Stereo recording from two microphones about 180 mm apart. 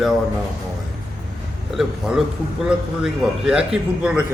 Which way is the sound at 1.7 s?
Centre (ahead or behind).